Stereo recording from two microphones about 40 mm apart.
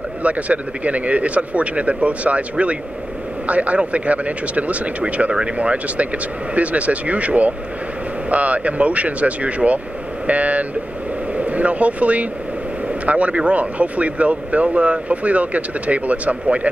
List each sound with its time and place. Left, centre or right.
0.2 s speech: right